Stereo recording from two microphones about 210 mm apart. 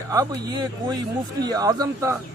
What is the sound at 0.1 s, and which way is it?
A man's voice, 15° right (ahead or behind).